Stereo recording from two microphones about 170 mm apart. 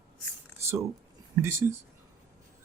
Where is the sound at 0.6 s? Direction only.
15° right (ahead or behind).